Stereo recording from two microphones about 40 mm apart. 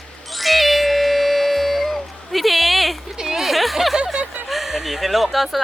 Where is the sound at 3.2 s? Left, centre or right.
Centre.